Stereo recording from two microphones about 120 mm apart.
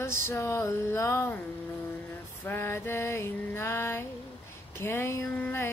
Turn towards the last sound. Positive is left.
turn(degrees=15)  # may be behind; listen again after turning